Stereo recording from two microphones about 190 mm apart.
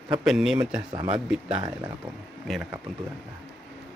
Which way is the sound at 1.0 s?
30° right (ahead or behind).